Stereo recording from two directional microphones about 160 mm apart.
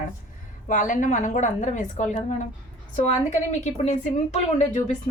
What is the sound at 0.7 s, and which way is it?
A woman's voice, 55° left (ahead or behind).